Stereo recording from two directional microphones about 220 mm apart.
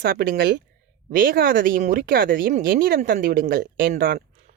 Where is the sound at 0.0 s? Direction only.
45° right (ahead or behind).